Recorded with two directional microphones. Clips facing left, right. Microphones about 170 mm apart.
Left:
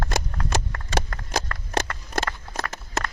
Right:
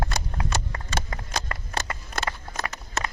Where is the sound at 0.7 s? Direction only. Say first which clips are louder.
Left 4 dB; 5° right (ahead or behind).